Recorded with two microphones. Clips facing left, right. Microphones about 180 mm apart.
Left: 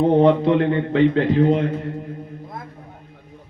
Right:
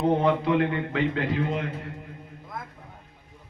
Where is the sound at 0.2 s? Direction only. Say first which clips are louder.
Left 7 dB; 30° left (ahead or behind).